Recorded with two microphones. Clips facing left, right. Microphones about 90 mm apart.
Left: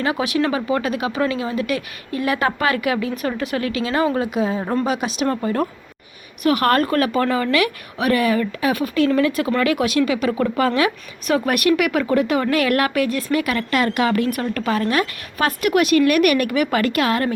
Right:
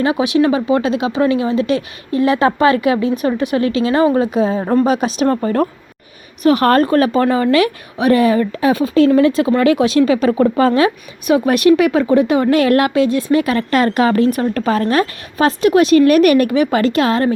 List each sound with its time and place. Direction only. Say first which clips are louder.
0.0 s speech: right 6 dB; 20° right (ahead or behind)
4.9 s speech: right 6 dB; 35° right (ahead or behind)
6.4 s speech: right 5 dB; 30° right (ahead or behind)